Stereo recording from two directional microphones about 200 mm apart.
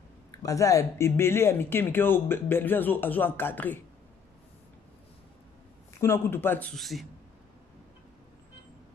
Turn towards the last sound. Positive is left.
turn(degrees=0)  # may be behind; listen again after turning